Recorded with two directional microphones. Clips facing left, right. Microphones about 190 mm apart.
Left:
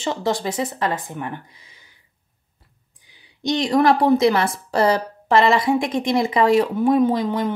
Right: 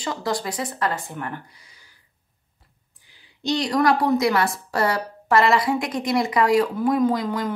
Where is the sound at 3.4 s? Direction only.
20° left (ahead or behind).